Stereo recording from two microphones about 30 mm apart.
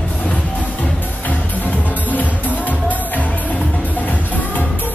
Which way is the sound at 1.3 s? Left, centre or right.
Left.